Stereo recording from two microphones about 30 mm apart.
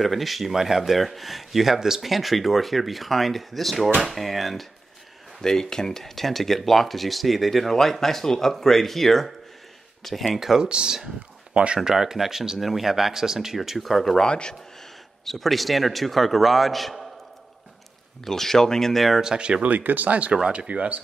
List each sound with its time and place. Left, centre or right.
0.0 s a man's voice: centre
0.6 s speech: centre
0.8 s a man's voice: centre
5.4 s speech: centre
10.2 s speech: centre
10.6 s speech: right
11.9 s speech: centre
13.6 s a man's voice: centre
14.2 s speech: left
15.2 s a man's voice: centre
18.2 s speech: centre
19.2 s speech: right
19.6 s speech: right